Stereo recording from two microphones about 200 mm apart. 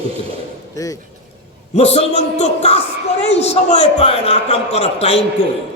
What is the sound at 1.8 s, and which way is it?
A man's voice, 30° left (ahead or behind).